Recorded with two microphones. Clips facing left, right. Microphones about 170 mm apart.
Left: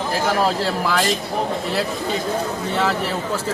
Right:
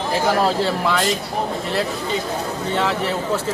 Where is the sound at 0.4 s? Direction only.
Centre (ahead or behind).